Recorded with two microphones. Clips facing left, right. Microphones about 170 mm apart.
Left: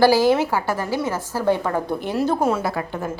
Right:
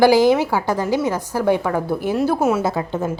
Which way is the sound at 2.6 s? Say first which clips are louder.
Right 4 dB; 25° right (ahead or behind).